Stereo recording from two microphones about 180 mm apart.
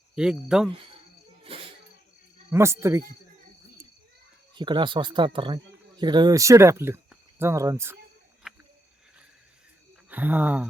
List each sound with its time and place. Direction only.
0.2 s speech: 5° right (ahead or behind)
1.5 s snake: 30° right (ahead or behind)
2.5 s speech: 15° right (ahead or behind)
4.5 s speech: 25° right (ahead or behind)
8.4 s a sound: 5° right (ahead or behind)
10.1 s speech: 10° right (ahead or behind)